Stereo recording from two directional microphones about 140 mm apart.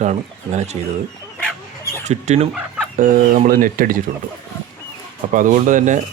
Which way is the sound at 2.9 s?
85° right.